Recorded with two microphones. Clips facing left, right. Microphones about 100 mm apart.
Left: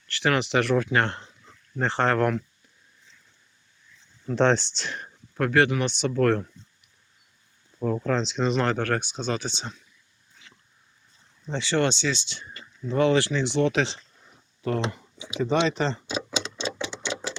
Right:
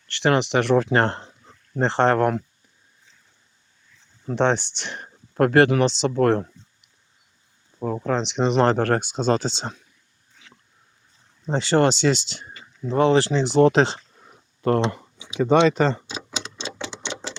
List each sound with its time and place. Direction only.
0.2 s speech: 25° right (ahead or behind)
0.9 s speech: 35° right (ahead or behind)
4.4 s speech: 15° right (ahead or behind)
5.3 s speech: 40° right (ahead or behind)
6.0 s speech: 30° right (ahead or behind)
7.8 s speech: 20° right (ahead or behind)
8.6 s speech: 35° right (ahead or behind)
11.4 s speech: 45° right (ahead or behind)
12.9 s speech: 30° right (ahead or behind)
14.8 s speech: 65° right (ahead or behind)
16.7 s a sound: 30° right (ahead or behind)